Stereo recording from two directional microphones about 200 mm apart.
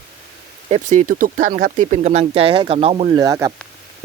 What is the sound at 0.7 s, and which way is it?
Speech, 40° right (ahead or behind).